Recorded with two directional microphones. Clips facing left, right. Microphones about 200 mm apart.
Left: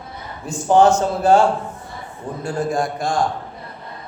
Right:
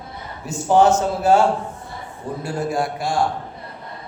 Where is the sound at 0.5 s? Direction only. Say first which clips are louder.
Left 1 dB; 20° right (ahead or behind).